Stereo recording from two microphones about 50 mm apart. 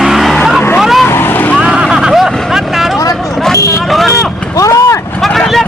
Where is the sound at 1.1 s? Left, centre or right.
Left.